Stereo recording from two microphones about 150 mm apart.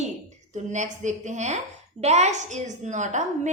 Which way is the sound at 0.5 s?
55° right (ahead or behind).